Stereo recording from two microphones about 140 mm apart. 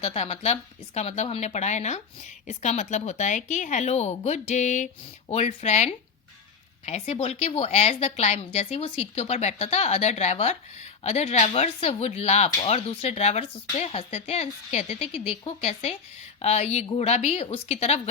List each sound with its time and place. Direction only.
0.0 s speech: 45° left (ahead or behind)